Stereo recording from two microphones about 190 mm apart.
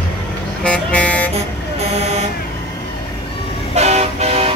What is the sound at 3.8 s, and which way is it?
Vehicle, 35° right (ahead or behind).